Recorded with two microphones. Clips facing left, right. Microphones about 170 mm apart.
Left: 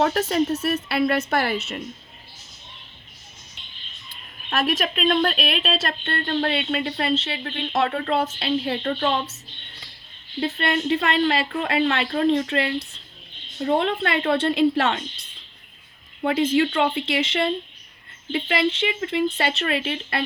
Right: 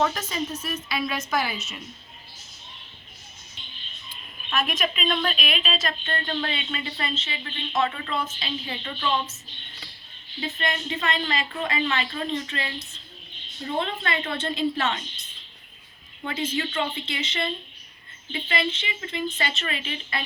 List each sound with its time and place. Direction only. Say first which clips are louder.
0.0 s a woman's voice: left 6 dB; 70° left (ahead or behind)
4.5 s a woman's voice: left 4 dB; 55° left (ahead or behind)
10.4 s a woman's voice: left 6 dB; 65° left (ahead or behind)
14.4 s speech: left 4 dB; 70° left (ahead or behind)
16.2 s a woman's voice: left 9 dB; 65° left (ahead or behind)